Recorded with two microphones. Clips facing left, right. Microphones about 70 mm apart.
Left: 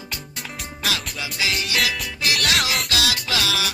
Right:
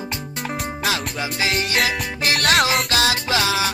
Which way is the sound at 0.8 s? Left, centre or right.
Right.